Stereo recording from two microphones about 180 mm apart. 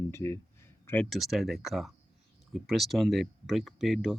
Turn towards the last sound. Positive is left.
turn(degrees=0)  # may be behind; listen again after turning